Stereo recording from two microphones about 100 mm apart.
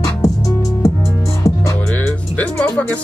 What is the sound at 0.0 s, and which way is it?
Music, 35° left (ahead or behind).